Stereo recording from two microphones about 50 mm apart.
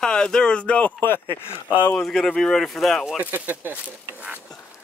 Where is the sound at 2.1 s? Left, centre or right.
Centre.